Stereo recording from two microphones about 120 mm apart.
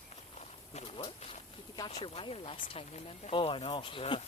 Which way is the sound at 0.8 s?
45° left (ahead or behind).